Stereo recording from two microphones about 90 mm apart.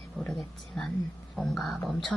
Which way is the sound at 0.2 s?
Centre (ahead or behind).